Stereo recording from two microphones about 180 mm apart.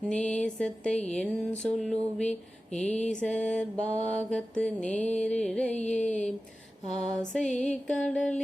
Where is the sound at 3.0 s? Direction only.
45° left (ahead or behind).